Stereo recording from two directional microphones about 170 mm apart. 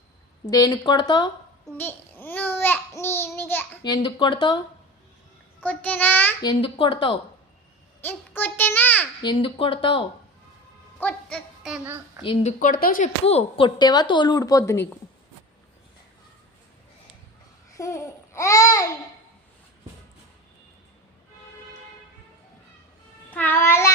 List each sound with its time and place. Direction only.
0.4 s a woman's voice: 20° left (ahead or behind)
1.8 s babbling: 10° left (ahead or behind)
3.8 s a woman's voice: 25° left (ahead or behind)
5.5 s babbling: 10° left (ahead or behind)
6.4 s a woman's voice: 30° left (ahead or behind)
8.0 s babbling: 10° left (ahead or behind)
9.2 s speech: 30° left (ahead or behind)
11.0 s speech: 5° left (ahead or behind)
12.2 s speech: 35° left (ahead or behind); by 13.1 s 55° left (ahead or behind)
13.2 s speech: 35° left (ahead or behind)
13.7 s a woman's voice: 25° left (ahead or behind)
17.7 s babbling: 20° left (ahead or behind)
23.3 s babbling: 10° left (ahead or behind)